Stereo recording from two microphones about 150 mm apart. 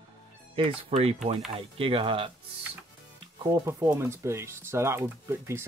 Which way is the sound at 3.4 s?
25° right (ahead or behind).